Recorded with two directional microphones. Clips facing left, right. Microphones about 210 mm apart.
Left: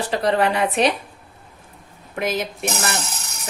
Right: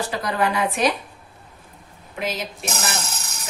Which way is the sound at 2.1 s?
55° left (ahead or behind).